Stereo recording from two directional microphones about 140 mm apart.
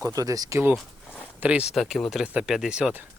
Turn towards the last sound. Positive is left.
turn(degrees=-10)  # may be behind; listen again after turning